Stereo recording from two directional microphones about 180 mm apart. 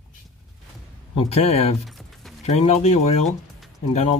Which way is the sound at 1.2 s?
35° left (ahead or behind).